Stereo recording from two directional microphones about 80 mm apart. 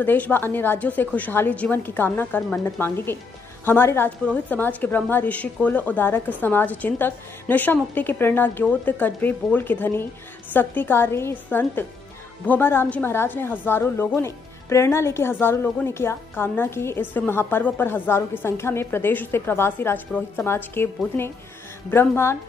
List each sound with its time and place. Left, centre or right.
0.0 s a woman's voice: left